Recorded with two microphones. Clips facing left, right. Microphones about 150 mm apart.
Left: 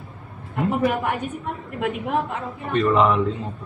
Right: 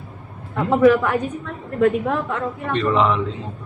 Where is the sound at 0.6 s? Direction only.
90° right.